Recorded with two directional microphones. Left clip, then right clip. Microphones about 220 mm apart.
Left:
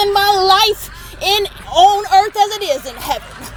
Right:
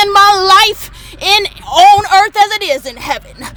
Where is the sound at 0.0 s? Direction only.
25° right (ahead or behind).